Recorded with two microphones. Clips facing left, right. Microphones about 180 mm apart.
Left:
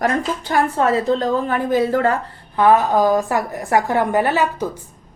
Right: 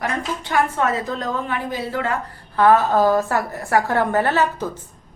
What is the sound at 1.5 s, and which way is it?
Speech, 50° left (ahead or behind).